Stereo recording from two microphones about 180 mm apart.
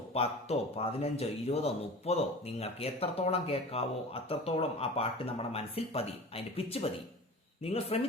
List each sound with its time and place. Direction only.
0.1 s speech: 35° left (ahead or behind)